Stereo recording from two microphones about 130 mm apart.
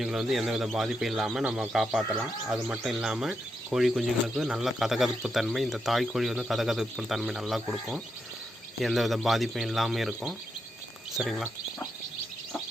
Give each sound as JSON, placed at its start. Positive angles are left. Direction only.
{"t": 0.0, "sound": "speech", "side_deg": -5}